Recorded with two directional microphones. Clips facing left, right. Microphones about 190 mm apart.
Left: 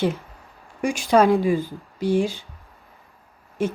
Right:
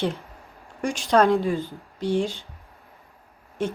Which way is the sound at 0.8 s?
10° left (ahead or behind).